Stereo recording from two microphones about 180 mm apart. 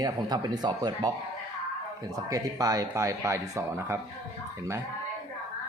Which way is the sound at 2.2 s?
20° right (ahead or behind).